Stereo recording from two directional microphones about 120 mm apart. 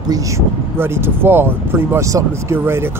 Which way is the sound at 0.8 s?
20° right (ahead or behind).